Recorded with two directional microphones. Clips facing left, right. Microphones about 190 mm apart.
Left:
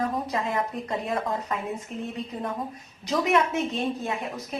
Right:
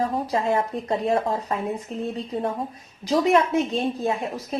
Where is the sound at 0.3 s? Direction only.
30° right (ahead or behind).